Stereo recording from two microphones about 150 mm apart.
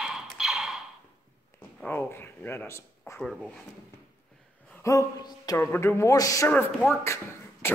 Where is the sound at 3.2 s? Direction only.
Centre (ahead or behind).